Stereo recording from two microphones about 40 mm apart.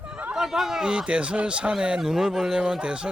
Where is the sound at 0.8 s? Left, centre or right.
Right.